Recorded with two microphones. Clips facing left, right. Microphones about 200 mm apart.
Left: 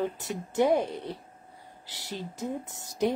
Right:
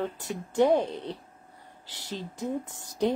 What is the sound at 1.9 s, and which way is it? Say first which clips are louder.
Speech: right 1 dB; 20° right (ahead or behind).